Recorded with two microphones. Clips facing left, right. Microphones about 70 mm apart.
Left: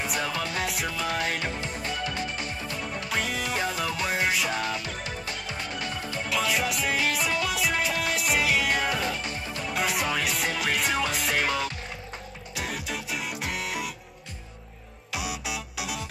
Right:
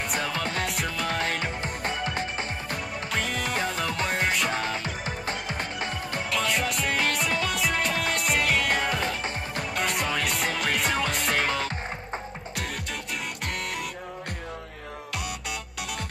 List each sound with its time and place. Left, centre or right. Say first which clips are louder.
0.0 s music: right 1 dB; centre
1.6 s music: right 2 dB; right
3.1 s music: even; centre
4.5 s music: right 1 dB; right
6.3 s music: even; centre
15.1 s music: left 3 dB; centre